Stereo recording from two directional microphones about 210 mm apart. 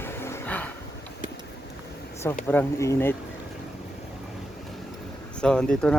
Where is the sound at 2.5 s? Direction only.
10° left (ahead or behind).